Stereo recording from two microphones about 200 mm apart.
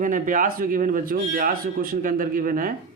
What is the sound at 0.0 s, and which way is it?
Speech, 40° right (ahead or behind).